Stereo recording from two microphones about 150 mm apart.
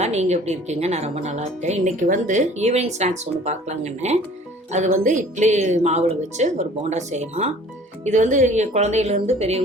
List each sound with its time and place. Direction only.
0.0 s speech: 45° right (ahead or behind)